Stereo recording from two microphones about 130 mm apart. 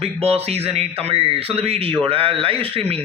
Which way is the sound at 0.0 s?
50° right (ahead or behind).